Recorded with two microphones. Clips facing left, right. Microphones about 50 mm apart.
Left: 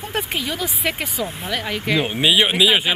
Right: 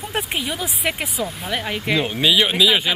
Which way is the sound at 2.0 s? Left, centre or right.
Centre.